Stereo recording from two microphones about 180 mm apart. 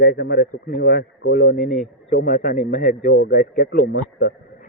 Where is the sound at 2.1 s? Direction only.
45° left (ahead or behind).